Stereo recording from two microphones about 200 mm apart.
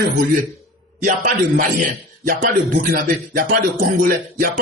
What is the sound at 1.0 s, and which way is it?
Speech, 40° right (ahead or behind).